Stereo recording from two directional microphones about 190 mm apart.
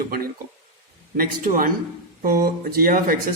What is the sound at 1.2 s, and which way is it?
Speech, 45° right (ahead or behind).